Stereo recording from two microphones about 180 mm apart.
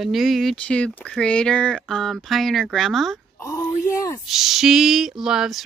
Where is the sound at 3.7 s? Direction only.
40° left (ahead or behind).